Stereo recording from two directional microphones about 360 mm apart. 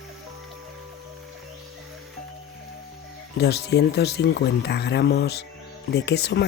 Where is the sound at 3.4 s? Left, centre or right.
Left.